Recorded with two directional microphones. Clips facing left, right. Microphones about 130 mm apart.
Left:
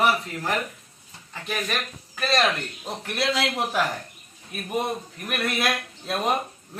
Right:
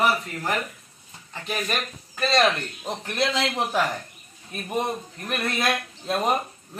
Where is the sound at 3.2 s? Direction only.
35° right (ahead or behind).